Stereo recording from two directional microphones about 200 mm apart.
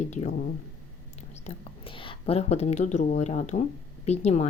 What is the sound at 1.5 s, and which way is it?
A woman's voice, 25° left (ahead or behind).